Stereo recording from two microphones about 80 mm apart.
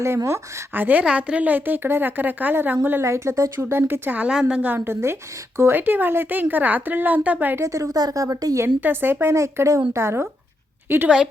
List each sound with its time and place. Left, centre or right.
0.3 s speech: right
4.4 s a woman's voice: centre
4.6 s speech: right
7.6 s a woman's voice: right
8.5 s speech: right
9.3 s a woman's voice: right